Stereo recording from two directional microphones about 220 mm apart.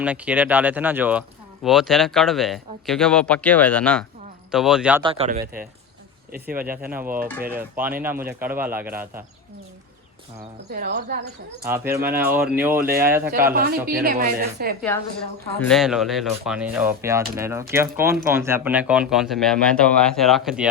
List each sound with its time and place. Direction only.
0.0 s speech: 5° right (ahead or behind)
5.0 s speech: 25° right (ahead or behind)
6.8 s speech: 10° right (ahead or behind)
10.7 s a woman's voice: 45° right (ahead or behind)
11.7 s speech: 10° right (ahead or behind)
13.3 s a man's voice: 40° right (ahead or behind)
14.8 s a woman's voice: 10° left (ahead or behind)